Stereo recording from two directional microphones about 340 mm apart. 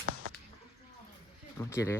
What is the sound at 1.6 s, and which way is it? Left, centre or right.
Speech, centre.